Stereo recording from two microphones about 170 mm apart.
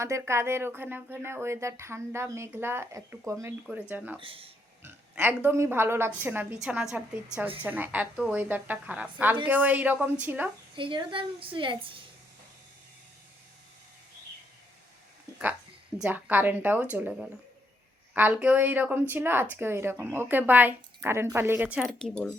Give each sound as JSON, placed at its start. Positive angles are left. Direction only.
{"t": 0.0, "sound": "a woman's voice", "side_deg": -15}
{"t": 4.2, "sound": "a woman's voice", "side_deg": -35}
{"t": 4.8, "sound": "a woman's voice", "side_deg": -10}
{"t": 10.8, "sound": "a woman's voice", "side_deg": -30}
{"t": 16.0, "sound": "a woman's voice", "side_deg": -10}